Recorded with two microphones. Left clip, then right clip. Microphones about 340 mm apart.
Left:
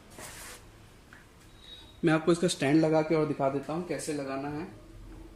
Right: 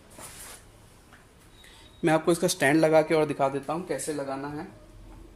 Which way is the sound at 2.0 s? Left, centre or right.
Centre.